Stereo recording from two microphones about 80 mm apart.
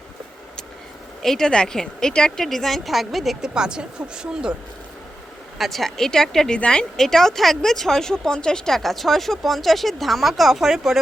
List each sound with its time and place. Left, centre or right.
1.2 s speech: centre
5.5 s speech: centre